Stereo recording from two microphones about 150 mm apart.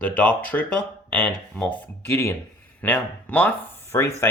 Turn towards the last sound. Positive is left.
turn(degrees=15)  # may be behind; listen again after turning